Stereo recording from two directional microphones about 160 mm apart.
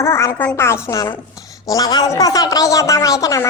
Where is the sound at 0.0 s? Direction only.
15° left (ahead or behind).